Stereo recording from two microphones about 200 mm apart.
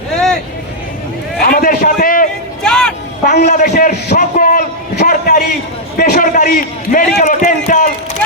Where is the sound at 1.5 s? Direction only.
45° left (ahead or behind).